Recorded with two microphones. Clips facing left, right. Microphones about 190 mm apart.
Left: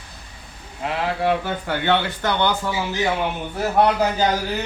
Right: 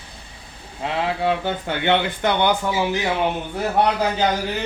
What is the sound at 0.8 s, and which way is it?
Speech, 25° right (ahead or behind).